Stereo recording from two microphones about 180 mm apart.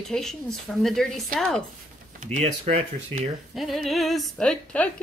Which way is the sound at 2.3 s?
35° right (ahead or behind).